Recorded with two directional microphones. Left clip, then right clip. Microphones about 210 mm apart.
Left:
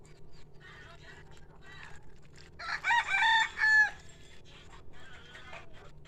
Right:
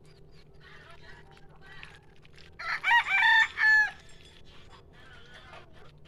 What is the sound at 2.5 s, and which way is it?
Chicken, 30° left (ahead or behind).